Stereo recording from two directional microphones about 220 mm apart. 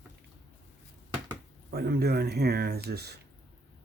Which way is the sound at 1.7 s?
45° right (ahead or behind).